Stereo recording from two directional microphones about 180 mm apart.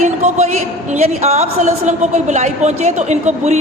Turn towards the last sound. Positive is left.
turn(degrees=-40)  # may be behind; listen again after turning